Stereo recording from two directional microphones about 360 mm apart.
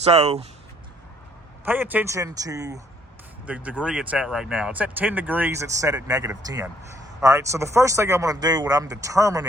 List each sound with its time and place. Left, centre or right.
0.0 s speech: centre
1.6 s speech: centre